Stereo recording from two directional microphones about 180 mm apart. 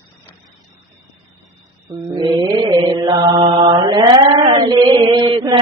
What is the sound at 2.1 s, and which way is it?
Mantra, 25° right (ahead or behind).